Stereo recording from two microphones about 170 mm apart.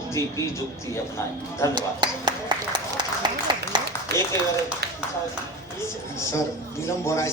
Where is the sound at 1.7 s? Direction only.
25° right (ahead or behind).